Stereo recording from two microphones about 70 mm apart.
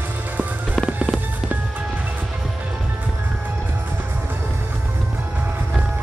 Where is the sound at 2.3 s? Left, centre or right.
Centre.